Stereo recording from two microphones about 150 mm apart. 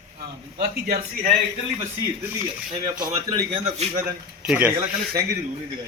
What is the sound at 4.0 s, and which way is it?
Speech, 10° right (ahead or behind).